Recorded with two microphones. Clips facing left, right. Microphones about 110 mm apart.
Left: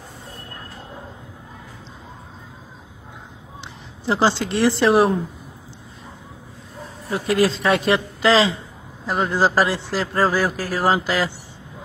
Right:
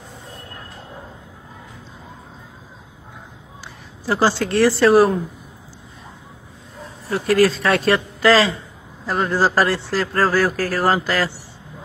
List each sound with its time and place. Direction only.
4.0 s a woman's voice: 20° left (ahead or behind)
7.1 s a man's voice: 15° left (ahead or behind)